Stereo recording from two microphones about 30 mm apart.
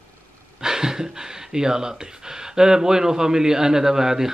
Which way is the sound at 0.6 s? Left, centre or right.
Centre.